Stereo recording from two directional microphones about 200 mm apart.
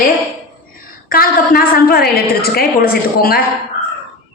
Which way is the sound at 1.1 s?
45° left (ahead or behind).